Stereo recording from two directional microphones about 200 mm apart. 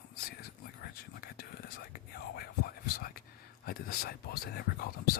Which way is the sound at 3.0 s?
45° left (ahead or behind).